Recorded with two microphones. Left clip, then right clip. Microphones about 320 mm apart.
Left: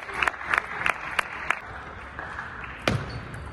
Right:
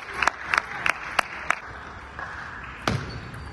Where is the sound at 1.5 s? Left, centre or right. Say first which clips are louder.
Right 1 dB; right.